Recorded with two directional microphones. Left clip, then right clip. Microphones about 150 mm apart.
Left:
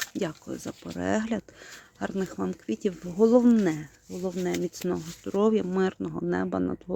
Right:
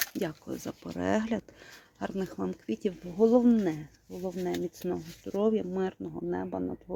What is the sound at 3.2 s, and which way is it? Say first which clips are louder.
Speech: left 3 dB; 30° left (ahead or behind).